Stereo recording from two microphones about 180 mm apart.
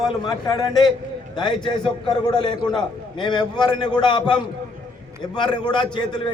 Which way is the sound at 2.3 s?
25° left (ahead or behind).